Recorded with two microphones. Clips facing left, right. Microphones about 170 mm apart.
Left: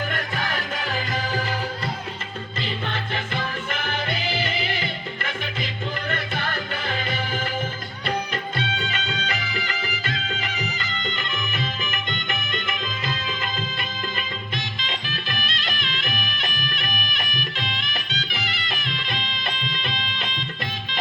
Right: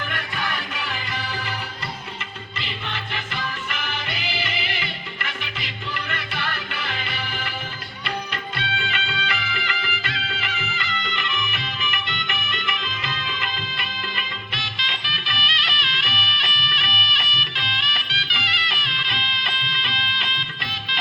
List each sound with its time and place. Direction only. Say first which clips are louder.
0.1 s music: left 2 dB; 45° left (ahead or behind)
2.6 s music: left 4 dB; 50° left (ahead or behind)